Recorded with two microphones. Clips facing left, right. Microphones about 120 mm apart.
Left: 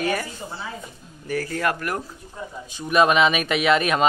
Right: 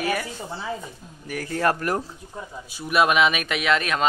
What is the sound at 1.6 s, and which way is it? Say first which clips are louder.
Speech: right 6 dB; 35° right (ahead or behind).